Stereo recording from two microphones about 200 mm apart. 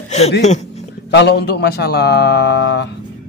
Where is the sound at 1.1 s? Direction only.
55° left (ahead or behind).